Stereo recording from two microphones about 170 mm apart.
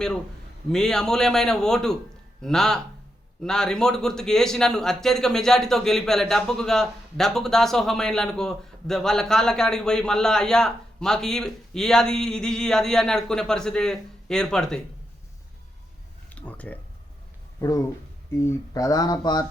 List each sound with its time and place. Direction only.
0.7 s a man's voice: 5° left (ahead or behind)
16.3 s a sound: 10° left (ahead or behind)
17.6 s speech: 20° left (ahead or behind)